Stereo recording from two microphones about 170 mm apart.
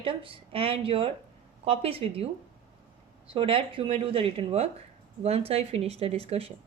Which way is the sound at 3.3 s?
30° right (ahead or behind).